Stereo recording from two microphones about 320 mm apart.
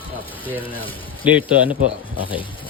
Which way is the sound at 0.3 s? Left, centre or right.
Centre.